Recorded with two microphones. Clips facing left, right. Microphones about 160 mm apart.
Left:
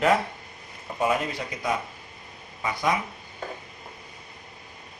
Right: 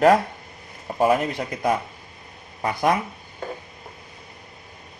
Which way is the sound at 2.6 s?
50° right (ahead or behind).